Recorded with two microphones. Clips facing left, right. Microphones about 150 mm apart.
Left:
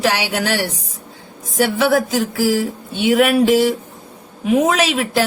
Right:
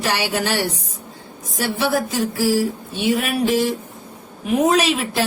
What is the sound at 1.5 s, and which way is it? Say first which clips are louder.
Speech: left 5 dB; 90° left.